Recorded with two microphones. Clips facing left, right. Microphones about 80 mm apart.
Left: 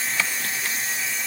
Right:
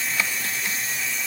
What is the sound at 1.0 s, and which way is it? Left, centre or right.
Steam, centre.